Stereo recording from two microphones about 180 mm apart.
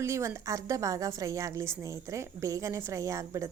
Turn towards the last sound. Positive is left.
turn(degrees=-15)  # may be behind; listen again after turning